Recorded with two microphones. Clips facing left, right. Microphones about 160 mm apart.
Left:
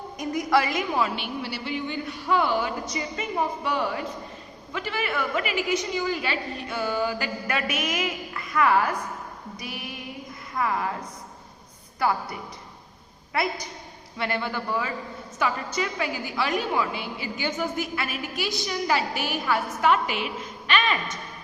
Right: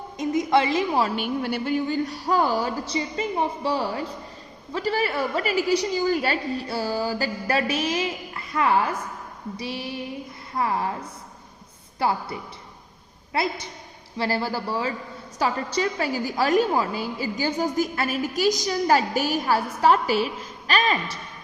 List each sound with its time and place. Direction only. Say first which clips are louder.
0.2 s a woman's voice: right 3 dB; 25° right (ahead or behind)